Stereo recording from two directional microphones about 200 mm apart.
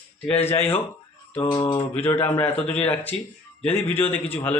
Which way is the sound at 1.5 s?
20° left (ahead or behind).